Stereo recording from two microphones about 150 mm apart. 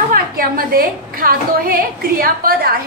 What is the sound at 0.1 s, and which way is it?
A woman's voice, 75° right (ahead or behind).